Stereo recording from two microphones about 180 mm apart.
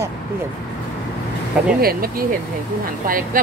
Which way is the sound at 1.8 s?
55° right (ahead or behind).